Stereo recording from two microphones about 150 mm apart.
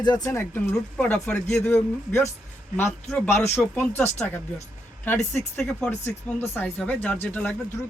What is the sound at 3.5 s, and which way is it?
A woman's voice, 15° left (ahead or behind).